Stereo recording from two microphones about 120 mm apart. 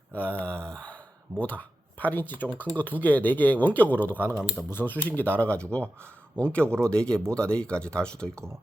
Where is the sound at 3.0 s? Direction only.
15° left (ahead or behind).